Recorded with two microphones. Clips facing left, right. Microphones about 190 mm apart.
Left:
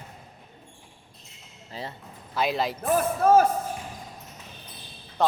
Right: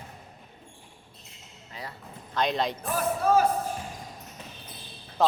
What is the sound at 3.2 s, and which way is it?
Speech, 45° left (ahead or behind).